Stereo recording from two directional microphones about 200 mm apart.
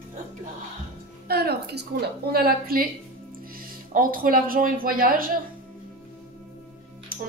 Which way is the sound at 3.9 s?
45° right (ahead or behind).